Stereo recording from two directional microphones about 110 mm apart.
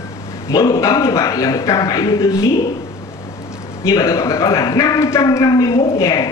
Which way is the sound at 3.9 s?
25° left (ahead or behind).